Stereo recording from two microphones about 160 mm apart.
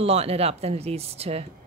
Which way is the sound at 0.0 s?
40° right (ahead or behind).